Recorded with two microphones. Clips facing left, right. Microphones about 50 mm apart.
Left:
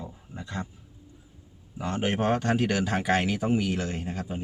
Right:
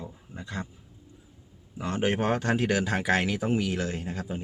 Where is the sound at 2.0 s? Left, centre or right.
Left.